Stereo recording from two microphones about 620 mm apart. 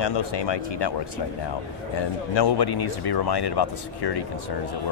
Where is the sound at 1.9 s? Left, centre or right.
Left.